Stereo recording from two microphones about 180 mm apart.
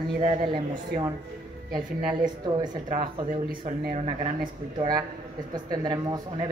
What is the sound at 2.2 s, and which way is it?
Speech, 20° right (ahead or behind).